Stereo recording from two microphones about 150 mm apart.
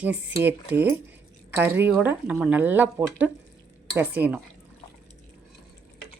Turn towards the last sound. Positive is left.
turn(degrees=-10)  # may be behind; listen again after turning